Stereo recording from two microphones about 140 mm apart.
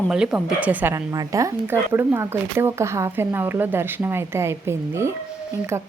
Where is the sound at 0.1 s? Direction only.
5° right (ahead or behind).